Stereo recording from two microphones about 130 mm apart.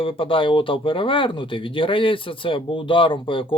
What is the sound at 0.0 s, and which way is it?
Speech, 45° left (ahead or behind).